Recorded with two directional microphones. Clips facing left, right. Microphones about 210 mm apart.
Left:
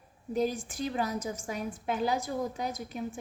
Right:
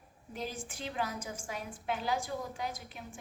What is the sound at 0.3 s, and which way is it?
A woman's voice, 40° left (ahead or behind).